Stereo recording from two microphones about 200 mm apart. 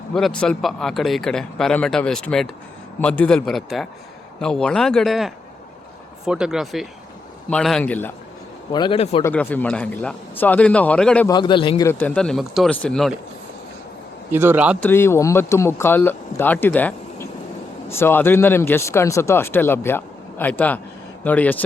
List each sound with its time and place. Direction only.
0.1 s speech: 5° left (ahead or behind)
8.7 s a man's voice: 25° left (ahead or behind)
9.2 s speech: 10° left (ahead or behind)
11.3 s a man's voice: 20° left (ahead or behind)
11.9 s speech: 10° left (ahead or behind)
14.3 s a man's voice: 10° right (ahead or behind)
14.8 s speech: 10° left (ahead or behind)